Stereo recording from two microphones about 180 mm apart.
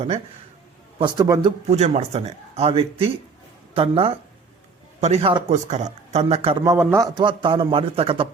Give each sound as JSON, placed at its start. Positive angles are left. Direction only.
{"t": 0.9, "sound": "speech", "side_deg": -25}
{"t": 1.8, "sound": "speech", "side_deg": -40}
{"t": 6.7, "sound": "a man's voice", "side_deg": -15}
{"t": 7.2, "sound": "speech", "side_deg": -25}